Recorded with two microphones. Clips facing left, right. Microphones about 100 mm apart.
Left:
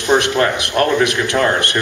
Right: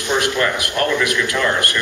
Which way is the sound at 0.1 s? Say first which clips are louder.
Left 4 dB; 40° left (ahead or behind).